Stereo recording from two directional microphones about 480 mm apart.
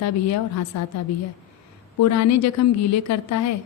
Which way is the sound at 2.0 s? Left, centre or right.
Left.